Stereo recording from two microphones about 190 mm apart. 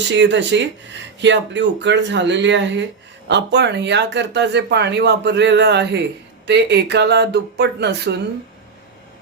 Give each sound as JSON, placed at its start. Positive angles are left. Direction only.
{"t": 0.1, "sound": "speech", "side_deg": -70}